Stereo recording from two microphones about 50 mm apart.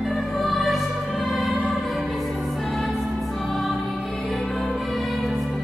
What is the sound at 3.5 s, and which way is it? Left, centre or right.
Music, centre.